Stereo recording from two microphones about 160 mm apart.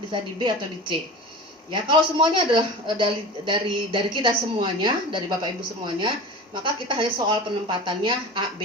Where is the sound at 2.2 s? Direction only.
30° right (ahead or behind).